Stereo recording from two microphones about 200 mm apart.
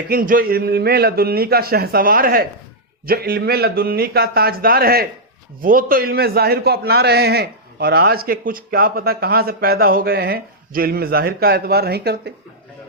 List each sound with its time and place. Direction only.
0.1 s a man's voice: 45° right (ahead or behind)